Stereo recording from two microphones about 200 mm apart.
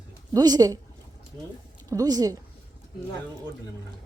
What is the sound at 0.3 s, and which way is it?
Speech, 20° right (ahead or behind).